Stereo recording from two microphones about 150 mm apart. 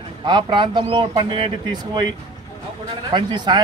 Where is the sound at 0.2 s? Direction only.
30° right (ahead or behind).